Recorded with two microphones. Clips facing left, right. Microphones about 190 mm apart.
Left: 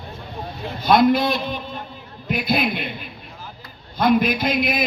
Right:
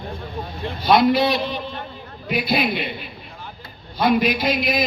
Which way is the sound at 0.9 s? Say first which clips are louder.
Even; 50° left (ahead or behind).